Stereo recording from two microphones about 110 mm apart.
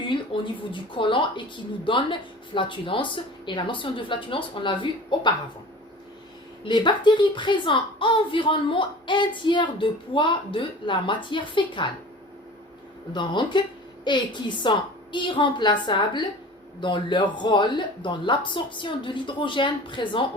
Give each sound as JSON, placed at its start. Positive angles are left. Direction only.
{"t": 0.0, "sound": "a woman's voice", "side_deg": 50}
{"t": 6.7, "sound": "a woman's voice", "side_deg": 45}
{"t": 13.1, "sound": "a woman's voice", "side_deg": 45}